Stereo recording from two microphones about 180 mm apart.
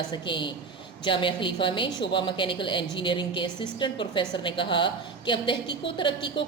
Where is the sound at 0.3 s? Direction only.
25° left (ahead or behind).